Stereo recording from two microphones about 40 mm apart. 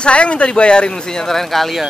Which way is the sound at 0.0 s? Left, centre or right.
Left.